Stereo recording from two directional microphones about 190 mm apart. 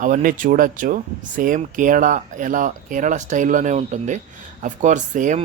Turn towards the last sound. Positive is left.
turn(degrees=-40)  # may be behind; listen again after turning